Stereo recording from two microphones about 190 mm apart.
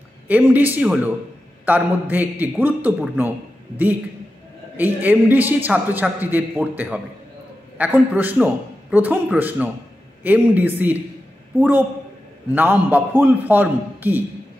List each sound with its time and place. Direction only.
0.3 s a man's voice: 10° right (ahead or behind)